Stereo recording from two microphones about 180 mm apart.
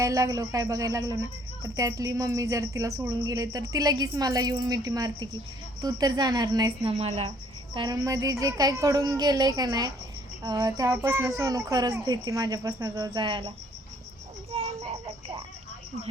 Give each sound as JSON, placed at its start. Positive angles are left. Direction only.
{"t": 0.0, "sound": "speech", "side_deg": -20}
{"t": 6.9, "sound": "speech", "side_deg": -35}
{"t": 14.5, "sound": "a sound", "side_deg": -35}